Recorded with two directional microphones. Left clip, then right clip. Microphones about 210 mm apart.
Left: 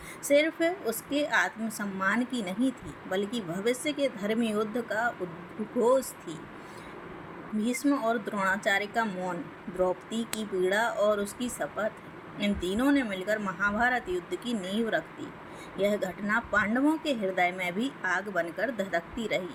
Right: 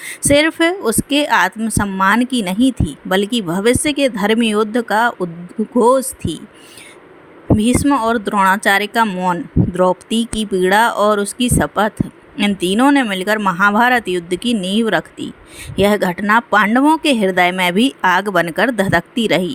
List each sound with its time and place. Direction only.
0.0 s a woman's voice: 50° right (ahead or behind)
7.6 s a woman's voice: 50° right (ahead or behind)